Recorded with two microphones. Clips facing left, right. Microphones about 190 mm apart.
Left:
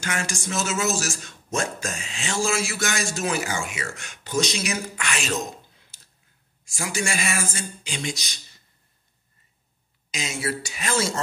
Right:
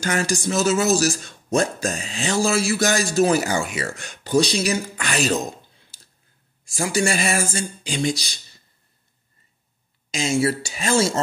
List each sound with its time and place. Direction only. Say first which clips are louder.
0.0 s speech: right 7 dB; 35° right (ahead or behind)
6.6 s speech: right 7 dB; 35° right (ahead or behind)
10.1 s speech: right 8 dB; 30° right (ahead or behind)